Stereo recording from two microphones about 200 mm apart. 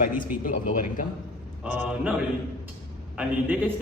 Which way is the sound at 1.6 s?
5° right (ahead or behind).